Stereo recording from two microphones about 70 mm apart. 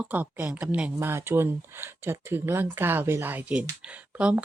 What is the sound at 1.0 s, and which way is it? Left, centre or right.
Speech, right.